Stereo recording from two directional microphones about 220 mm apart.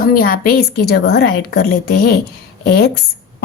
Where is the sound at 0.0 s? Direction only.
40° left (ahead or behind).